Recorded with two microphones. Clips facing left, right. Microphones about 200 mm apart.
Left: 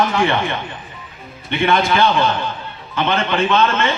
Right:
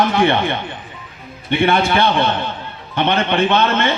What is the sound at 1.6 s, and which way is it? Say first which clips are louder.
Speech: right 1 dB; 30° right (ahead or behind).